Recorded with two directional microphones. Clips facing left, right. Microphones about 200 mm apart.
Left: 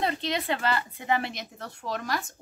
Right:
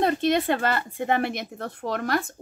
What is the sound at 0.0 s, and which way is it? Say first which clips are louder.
A woman's voice: right 7 dB; 50° right (ahead or behind).